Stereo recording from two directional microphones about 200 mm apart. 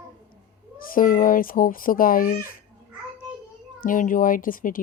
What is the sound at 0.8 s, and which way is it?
A woman's voice, 45° left (ahead or behind).